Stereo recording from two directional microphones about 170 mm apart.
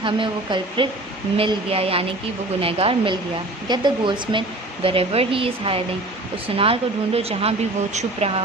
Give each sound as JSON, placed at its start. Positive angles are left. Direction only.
{"t": 0.0, "sound": "a woman's voice", "side_deg": -30}